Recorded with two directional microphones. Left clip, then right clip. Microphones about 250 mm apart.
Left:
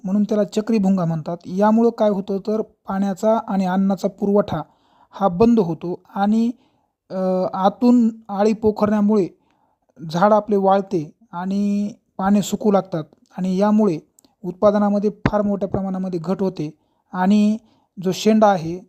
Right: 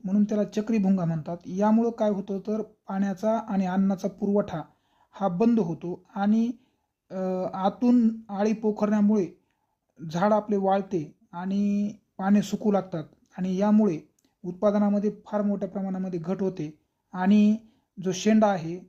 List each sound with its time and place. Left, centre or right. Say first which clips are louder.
0.0 s speech: left 7 dB; left